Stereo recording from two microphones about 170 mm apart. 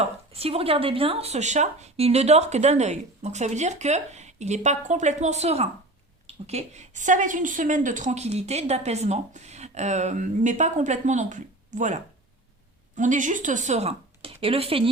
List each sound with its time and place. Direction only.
0.0 s a woman's voice: 35° right (ahead or behind)
13.0 s speech: 50° right (ahead or behind)